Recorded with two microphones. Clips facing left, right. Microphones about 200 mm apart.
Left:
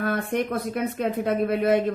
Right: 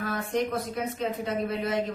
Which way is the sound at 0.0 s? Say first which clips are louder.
Left 3 dB; 60° left (ahead or behind).